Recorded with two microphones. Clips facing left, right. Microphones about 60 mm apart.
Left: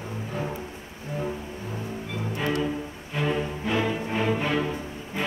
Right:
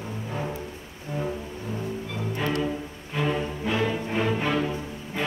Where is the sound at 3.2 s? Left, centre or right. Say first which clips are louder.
Even; centre.